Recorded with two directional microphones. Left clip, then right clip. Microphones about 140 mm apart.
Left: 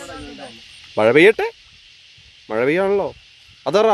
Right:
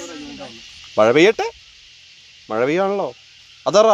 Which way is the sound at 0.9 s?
40° left (ahead or behind).